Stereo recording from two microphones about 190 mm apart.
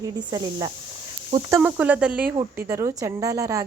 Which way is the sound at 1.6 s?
5° right (ahead or behind).